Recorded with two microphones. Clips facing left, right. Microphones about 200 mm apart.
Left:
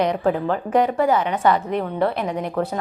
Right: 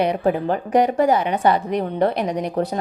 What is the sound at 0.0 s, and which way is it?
A woman's voice, 15° right (ahead or behind).